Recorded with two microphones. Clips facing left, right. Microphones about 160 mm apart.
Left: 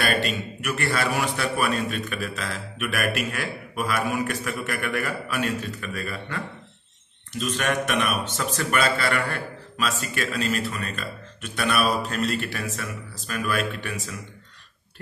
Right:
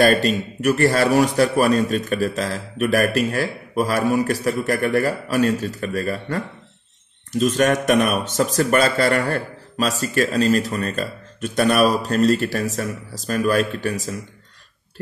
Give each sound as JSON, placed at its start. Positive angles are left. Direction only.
{"t": 0.0, "sound": "speech", "side_deg": -40}